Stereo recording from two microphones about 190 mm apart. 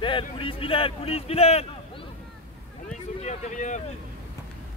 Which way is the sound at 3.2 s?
40° left (ahead or behind).